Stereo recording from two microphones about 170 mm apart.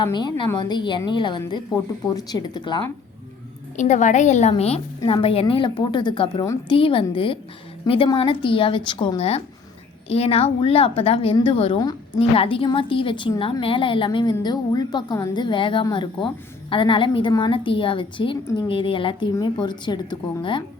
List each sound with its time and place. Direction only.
0.0 s a woman's voice: 25° left (ahead or behind)
3.8 s a woman's voice: 45° left (ahead or behind); by 20.7 s 30° left (ahead or behind)